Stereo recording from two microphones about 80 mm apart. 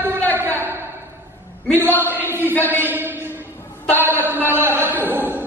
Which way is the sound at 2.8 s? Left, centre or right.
Right.